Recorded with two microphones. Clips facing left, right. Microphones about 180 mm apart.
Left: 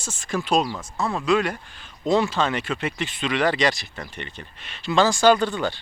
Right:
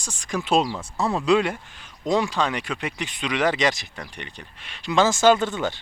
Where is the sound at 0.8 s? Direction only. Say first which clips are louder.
Right 1 dB; 35° right (ahead or behind).